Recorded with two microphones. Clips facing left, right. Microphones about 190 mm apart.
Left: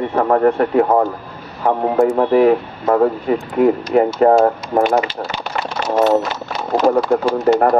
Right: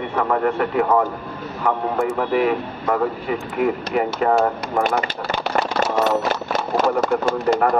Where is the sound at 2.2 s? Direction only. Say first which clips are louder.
Left 6 dB; 40° left (ahead or behind).